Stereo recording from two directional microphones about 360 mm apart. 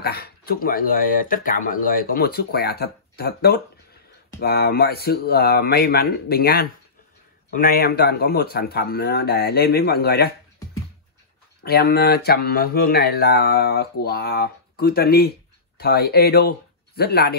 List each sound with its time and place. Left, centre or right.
0.0 s speech: left
11.6 s speech: left